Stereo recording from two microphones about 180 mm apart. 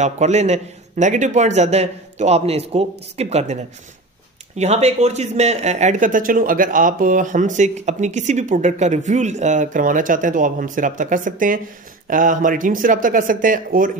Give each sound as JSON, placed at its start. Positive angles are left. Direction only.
{"t": 0.0, "sound": "a man's voice", "side_deg": -40}
{"t": 4.6, "sound": "speech", "side_deg": -35}